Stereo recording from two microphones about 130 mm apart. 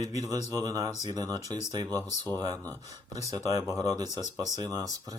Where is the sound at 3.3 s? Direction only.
25° right (ahead or behind).